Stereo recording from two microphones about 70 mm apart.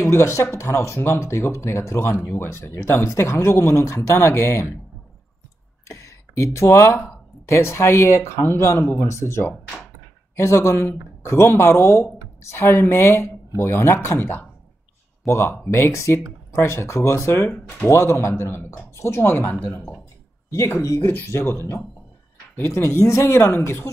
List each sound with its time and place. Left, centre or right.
0.0 s speech: left
5.9 s speech: left
17.5 s speech: centre
17.8 s speech: left
20.4 s speech: left